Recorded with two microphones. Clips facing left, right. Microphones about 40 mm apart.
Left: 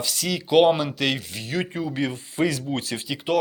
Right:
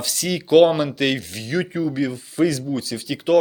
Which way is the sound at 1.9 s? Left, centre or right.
Left.